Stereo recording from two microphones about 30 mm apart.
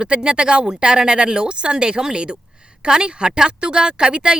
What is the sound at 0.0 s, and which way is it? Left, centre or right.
A woman's voice, right.